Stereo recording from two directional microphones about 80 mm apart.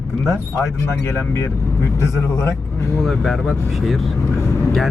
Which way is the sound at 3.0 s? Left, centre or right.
Centre.